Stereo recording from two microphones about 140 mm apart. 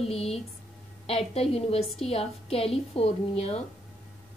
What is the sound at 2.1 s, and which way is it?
A woman's voice, 45° left (ahead or behind).